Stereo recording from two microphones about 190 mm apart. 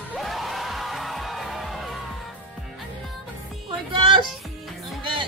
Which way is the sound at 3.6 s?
25° right (ahead or behind).